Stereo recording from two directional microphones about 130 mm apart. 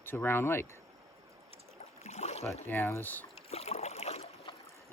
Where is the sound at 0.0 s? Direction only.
15° left (ahead or behind).